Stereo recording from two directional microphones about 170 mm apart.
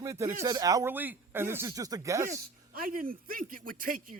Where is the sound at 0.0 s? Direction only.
15° right (ahead or behind).